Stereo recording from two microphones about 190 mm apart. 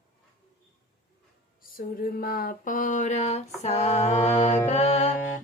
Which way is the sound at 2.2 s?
45° left (ahead or behind).